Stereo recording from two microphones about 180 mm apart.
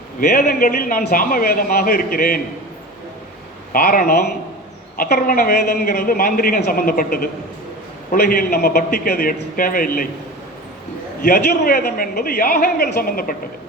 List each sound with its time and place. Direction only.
0.2 s a man's voice: 55° left (ahead or behind)
3.7 s a man's voice: 55° left (ahead or behind)
11.2 s a man's voice: 50° left (ahead or behind)